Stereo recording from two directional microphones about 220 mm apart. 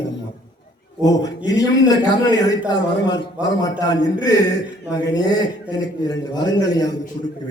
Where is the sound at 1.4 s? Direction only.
15° left (ahead or behind).